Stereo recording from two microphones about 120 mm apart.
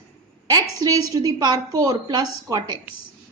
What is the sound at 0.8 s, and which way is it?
A woman's voice, 30° right (ahead or behind).